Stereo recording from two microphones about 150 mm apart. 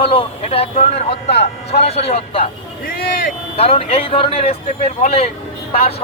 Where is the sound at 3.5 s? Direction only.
40° left (ahead or behind).